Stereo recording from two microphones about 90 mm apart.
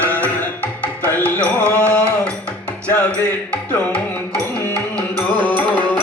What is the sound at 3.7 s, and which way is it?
Music, 15° left (ahead or behind).